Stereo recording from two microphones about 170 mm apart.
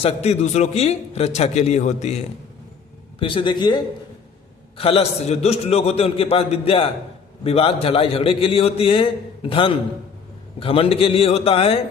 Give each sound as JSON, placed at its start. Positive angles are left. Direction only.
{"t": 0.0, "sound": "a man's voice", "side_deg": 40}
{"t": 3.2, "sound": "a man's voice", "side_deg": 30}
{"t": 4.8, "sound": "a man's voice", "side_deg": 35}